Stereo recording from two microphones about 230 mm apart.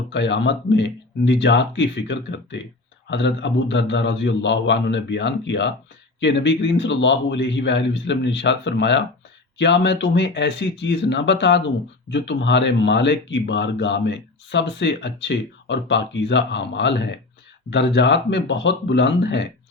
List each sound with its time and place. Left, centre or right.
0.1 s speech: left